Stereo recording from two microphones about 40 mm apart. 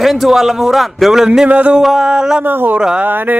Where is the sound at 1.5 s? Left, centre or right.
Right.